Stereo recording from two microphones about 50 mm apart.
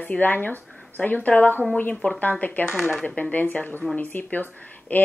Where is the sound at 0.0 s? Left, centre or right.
Left.